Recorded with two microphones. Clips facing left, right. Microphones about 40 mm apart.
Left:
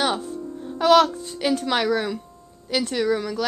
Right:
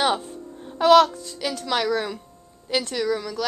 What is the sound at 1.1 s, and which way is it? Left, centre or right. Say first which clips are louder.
A woman's voice: left 6 dB; left.